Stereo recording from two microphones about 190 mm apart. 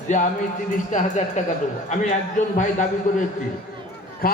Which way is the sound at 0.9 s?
40° left (ahead or behind).